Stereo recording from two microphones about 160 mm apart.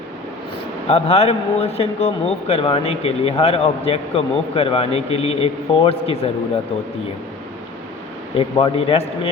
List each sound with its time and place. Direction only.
0.9 s a man's voice: 40° left (ahead or behind)
8.4 s a man's voice: 35° left (ahead or behind)